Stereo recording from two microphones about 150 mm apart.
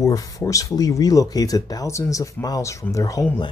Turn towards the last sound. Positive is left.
turn(degrees=25)  # may be behind; listen again after turning